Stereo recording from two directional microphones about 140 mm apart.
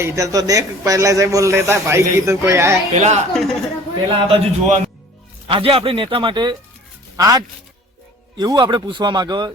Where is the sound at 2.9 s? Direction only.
55° right (ahead or behind).